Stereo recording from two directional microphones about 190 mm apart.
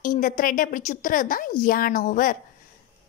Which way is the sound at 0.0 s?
45° left (ahead or behind).